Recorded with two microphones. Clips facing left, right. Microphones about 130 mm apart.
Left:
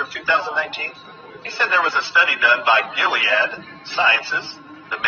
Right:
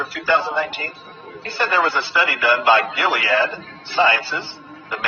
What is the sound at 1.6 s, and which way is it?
Speech, 45° right (ahead or behind).